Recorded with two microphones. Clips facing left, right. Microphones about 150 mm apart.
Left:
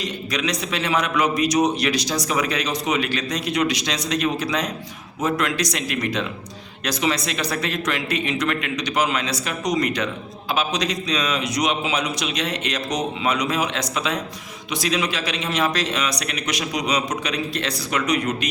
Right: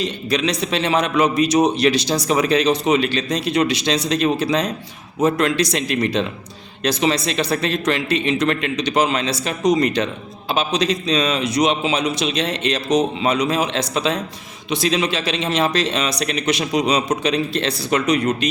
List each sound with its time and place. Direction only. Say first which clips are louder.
0.0 s a man's voice: right 5 dB; 30° right (ahead or behind)